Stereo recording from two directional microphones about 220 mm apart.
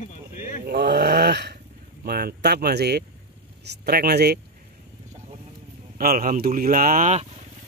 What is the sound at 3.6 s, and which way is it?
Speech, 50° right (ahead or behind).